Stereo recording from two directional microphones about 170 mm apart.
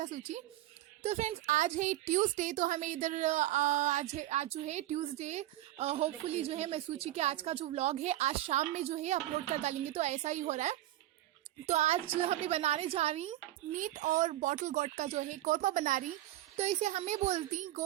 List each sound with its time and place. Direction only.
0.0 s a woman's voice: 45° right (ahead or behind)